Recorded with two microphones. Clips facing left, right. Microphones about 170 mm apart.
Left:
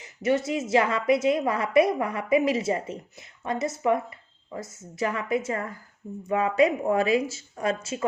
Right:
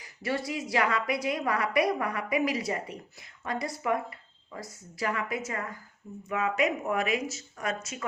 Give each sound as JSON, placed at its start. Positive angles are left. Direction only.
{"t": 0.0, "sound": "a woman's voice", "side_deg": 20}